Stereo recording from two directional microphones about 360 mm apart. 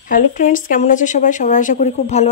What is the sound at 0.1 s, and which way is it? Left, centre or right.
A woman's voice, left.